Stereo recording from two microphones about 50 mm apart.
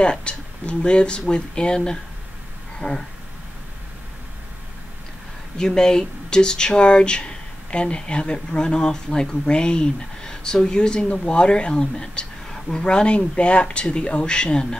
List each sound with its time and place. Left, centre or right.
0.0 s speech: left
2.8 s speech: left
5.6 s speech: centre